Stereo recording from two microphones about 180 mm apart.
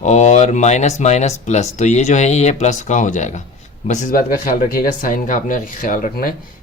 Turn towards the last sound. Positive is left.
turn(degrees=50)  # may be behind; listen again after turning